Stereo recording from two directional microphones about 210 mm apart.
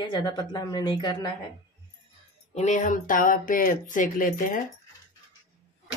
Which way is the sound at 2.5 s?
35° left (ahead or behind).